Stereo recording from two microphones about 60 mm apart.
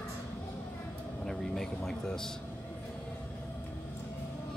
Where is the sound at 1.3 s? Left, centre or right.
Centre.